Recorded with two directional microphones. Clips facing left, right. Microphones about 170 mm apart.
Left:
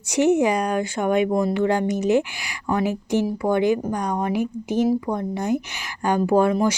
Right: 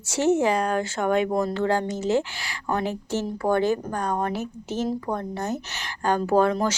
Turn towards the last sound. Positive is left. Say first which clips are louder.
# left 3 dB
turn(degrees=10)  # may be behind; listen again after turning